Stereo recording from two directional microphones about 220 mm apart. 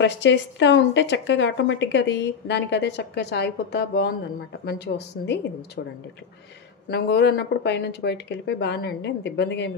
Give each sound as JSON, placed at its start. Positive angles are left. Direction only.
{"t": 0.0, "sound": "a woman's voice", "side_deg": 55}